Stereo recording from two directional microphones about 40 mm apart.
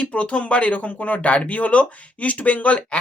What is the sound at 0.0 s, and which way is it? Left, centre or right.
Speech, left.